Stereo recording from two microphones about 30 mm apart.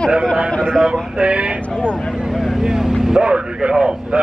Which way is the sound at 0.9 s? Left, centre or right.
Right.